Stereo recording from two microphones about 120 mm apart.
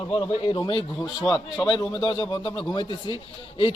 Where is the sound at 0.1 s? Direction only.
40° left (ahead or behind).